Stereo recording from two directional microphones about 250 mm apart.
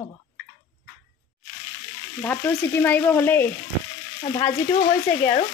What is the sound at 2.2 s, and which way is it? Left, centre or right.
A woman's voice, centre.